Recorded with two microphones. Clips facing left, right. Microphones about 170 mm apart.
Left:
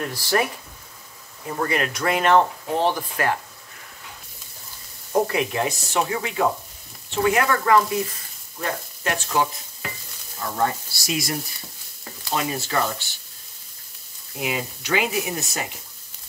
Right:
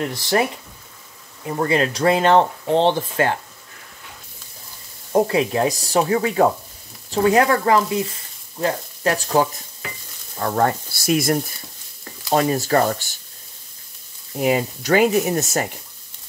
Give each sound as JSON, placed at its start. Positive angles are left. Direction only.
{"t": 0.0, "sound": "speech", "side_deg": -20}
{"t": 1.6, "sound": "speech", "side_deg": -30}
{"t": 5.2, "sound": "speech", "side_deg": -30}
{"t": 8.5, "sound": "frying", "side_deg": -30}
{"t": 10.4, "sound": "speech", "side_deg": -60}
{"t": 12.4, "sound": "speech", "side_deg": -40}
{"t": 14.4, "sound": "speech", "side_deg": -40}